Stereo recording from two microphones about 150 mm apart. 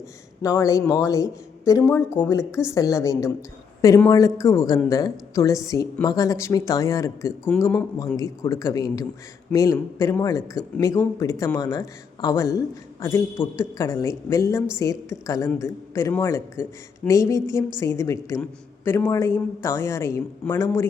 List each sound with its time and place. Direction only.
0.4 s a woman's voice: 20° left (ahead or behind)
7.9 s a woman's voice: 25° left (ahead or behind)